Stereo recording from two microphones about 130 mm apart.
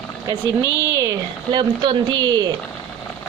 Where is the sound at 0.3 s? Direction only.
25° right (ahead or behind).